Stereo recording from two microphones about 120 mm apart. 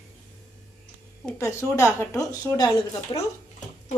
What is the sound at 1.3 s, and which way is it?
A woman's voice, 25° left (ahead or behind).